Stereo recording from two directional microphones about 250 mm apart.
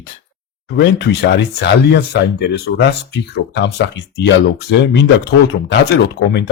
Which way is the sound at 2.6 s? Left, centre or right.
Left.